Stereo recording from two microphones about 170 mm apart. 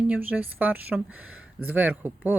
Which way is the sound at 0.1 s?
10° right (ahead or behind).